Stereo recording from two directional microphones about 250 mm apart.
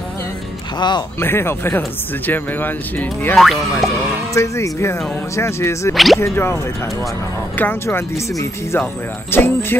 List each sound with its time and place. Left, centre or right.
0.7 s speech: centre
5.9 s speech: centre